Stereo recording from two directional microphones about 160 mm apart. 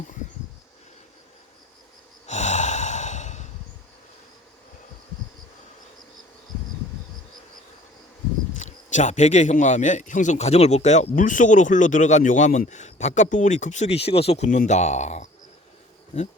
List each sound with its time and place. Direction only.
2.2 s sigh: 45° left (ahead or behind)
8.5 s speech: 50° left (ahead or behind)